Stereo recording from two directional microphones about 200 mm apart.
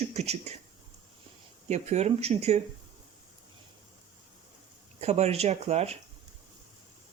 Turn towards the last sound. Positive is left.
turn(degrees=-30)  # may be behind; listen again after turning